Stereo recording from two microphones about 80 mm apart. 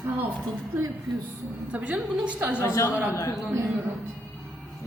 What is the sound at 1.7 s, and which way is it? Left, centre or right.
Speech, centre.